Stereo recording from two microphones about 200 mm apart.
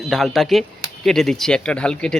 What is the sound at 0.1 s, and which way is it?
Speech, centre (ahead or behind).